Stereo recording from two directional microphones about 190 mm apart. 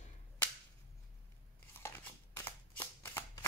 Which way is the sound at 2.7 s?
10° left (ahead or behind).